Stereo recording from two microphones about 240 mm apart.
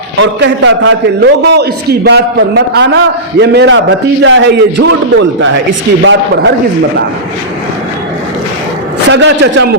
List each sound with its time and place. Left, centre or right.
0.2 s a man's voice: right
4.9 s a man's voice: right
9.0 s a man's voice: right